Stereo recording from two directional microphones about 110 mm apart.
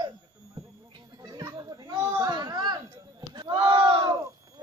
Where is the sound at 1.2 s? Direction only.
40° right (ahead or behind).